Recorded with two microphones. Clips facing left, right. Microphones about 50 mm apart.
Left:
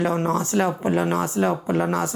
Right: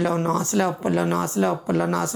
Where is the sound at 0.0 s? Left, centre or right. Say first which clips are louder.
Even; left.